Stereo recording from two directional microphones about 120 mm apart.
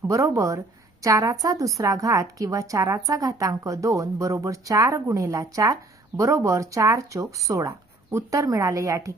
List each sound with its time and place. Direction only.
0.0 s speech: 25° right (ahead or behind)